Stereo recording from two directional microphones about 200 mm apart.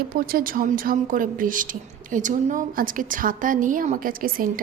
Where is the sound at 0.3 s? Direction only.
45° right (ahead or behind).